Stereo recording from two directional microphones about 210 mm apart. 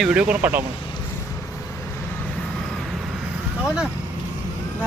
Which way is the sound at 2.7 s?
Centre (ahead or behind).